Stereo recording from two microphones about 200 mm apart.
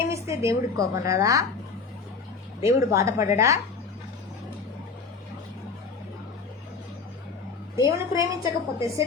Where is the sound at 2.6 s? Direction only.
15° right (ahead or behind).